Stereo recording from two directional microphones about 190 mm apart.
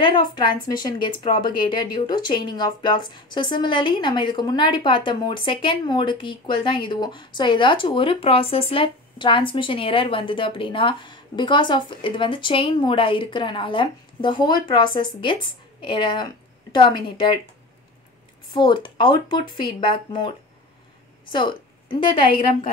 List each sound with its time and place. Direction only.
0.0 s speech: 25° left (ahead or behind)
18.5 s a woman's voice: 25° left (ahead or behind)
22.3 s a woman's voice: 45° left (ahead or behind)